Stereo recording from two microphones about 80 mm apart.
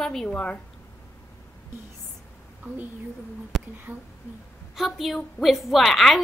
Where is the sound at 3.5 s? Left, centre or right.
Centre.